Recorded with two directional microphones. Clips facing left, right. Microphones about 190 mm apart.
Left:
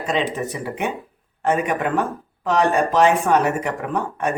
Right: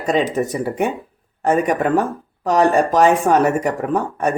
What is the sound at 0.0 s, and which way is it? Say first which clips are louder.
A man's voice: right 5 dB; 40° right (ahead or behind).